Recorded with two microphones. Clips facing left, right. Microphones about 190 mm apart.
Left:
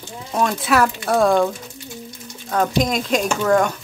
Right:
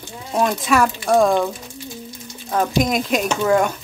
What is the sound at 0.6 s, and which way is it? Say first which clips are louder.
Speech: even; 5° left (ahead or behind).